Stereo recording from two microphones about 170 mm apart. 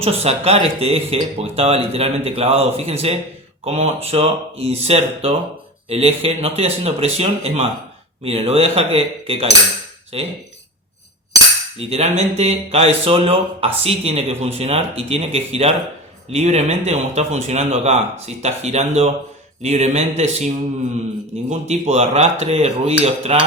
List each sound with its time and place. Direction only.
0.0 s speech: 35° right (ahead or behind)
11.8 s speech: 35° right (ahead or behind)